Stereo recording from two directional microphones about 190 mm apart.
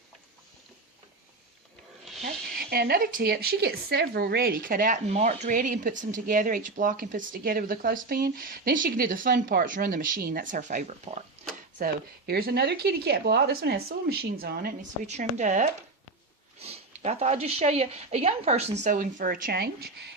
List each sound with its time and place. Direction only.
2.2 s a woman's voice: 55° right (ahead or behind); by 11.2 s 35° right (ahead or behind)
11.8 s speech: 55° right (ahead or behind)
15.0 s speech: 35° right (ahead or behind); by 20.1 s 55° right (ahead or behind)